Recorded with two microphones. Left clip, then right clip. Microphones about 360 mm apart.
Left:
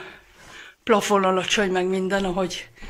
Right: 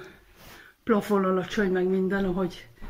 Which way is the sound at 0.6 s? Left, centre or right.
Centre.